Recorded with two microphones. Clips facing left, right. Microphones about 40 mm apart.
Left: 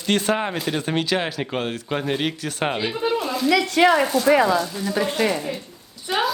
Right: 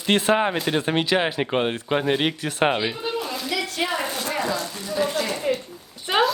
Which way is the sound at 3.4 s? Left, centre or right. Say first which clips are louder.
Left 13 dB; left.